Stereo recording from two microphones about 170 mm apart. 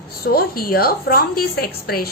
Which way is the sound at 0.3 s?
60° left (ahead or behind).